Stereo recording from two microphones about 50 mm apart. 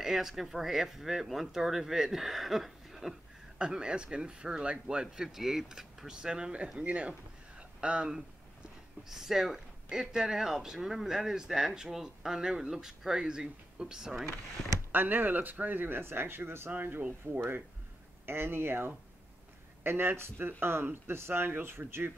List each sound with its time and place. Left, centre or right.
0.0 s speech: centre
3.5 s a man's voice: centre
6.8 s a sound: right
9.1 s speech: centre
14.9 s speech: right
16.0 s speech: right
16.7 s speech: right
18.2 s speech: right